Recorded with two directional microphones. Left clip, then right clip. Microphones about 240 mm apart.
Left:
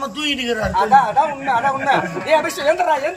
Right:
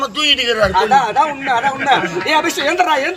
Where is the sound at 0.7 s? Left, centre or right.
Centre.